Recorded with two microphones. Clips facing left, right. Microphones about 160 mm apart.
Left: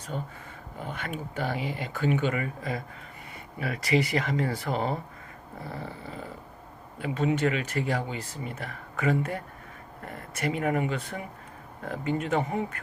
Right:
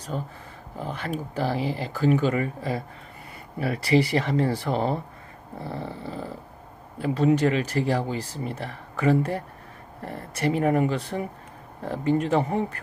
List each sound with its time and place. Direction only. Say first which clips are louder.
0.1 s speech: right 3 dB; 90° right
0.8 s speech: right 5 dB; 35° right (ahead or behind)
5.5 s a sound: right 5 dB; 30° right (ahead or behind)
7.0 s speech: right 5 dB; 35° right (ahead or behind)